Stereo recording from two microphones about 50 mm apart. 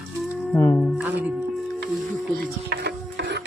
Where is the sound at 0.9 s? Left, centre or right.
Right.